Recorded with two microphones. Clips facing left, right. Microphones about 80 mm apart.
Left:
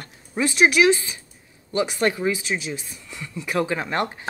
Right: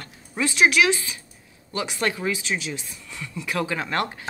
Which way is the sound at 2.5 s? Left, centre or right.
Centre.